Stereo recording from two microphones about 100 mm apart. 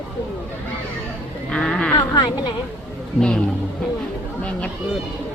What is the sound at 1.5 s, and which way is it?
Speech, 5° left (ahead or behind).